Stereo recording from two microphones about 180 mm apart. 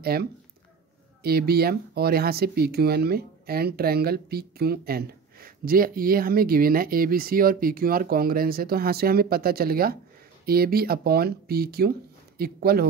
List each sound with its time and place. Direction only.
0.0 s speech: 60° right (ahead or behind)